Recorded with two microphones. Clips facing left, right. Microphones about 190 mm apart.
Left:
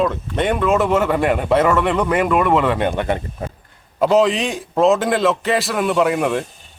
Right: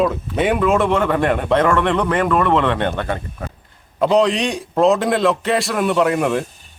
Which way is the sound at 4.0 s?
Centre (ahead or behind).